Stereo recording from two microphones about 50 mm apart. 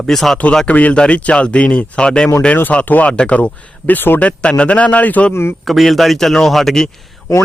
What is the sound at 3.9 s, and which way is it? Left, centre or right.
Speech, left.